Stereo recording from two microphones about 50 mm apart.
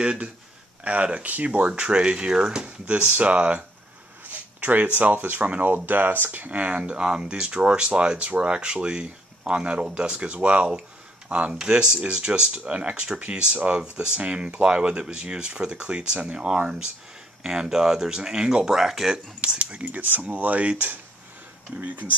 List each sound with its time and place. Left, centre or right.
0.0 s speech: centre
1.7 s speech: centre
2.9 s speech: right
5.9 s speech: right; by 19.1 s centre
19.1 s speech: centre